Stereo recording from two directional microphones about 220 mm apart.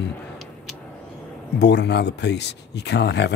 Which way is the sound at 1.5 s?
50° left (ahead or behind).